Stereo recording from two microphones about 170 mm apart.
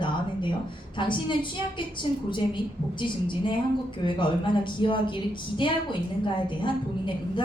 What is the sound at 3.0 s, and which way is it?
A woman's voice, 30° left (ahead or behind).